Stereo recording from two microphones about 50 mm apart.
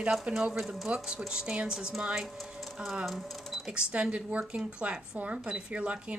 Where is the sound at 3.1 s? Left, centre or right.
Centre.